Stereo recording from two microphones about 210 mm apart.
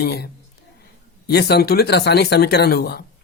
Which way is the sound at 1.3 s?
50° left (ahead or behind).